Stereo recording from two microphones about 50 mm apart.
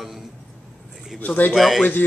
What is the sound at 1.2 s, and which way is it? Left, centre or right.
Speech, left.